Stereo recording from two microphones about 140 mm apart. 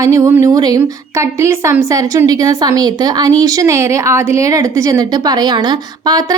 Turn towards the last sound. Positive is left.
turn(degrees=-25)  # may be behind; listen again after turning